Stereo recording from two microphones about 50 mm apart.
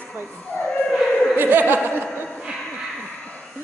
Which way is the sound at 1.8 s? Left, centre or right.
Right.